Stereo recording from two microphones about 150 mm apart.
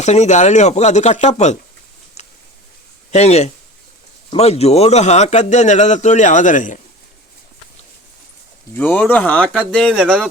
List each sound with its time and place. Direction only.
0.0 s speech: 50° left (ahead or behind)
2.2 s a sound: 45° left (ahead or behind)
3.1 s speech: 45° left (ahead or behind)
8.7 s speech: 10° left (ahead or behind)